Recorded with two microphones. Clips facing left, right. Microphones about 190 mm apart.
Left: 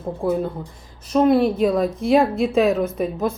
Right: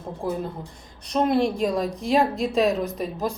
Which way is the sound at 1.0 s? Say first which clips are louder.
Left 5 dB; 5° left (ahead or behind).